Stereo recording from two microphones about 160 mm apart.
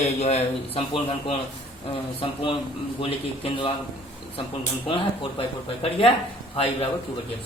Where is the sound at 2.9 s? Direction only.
35° left (ahead or behind).